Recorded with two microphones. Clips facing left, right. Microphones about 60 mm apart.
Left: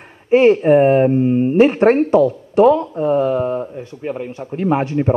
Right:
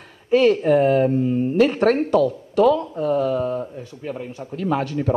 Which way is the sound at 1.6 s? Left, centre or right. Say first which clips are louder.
Left 5 dB; left.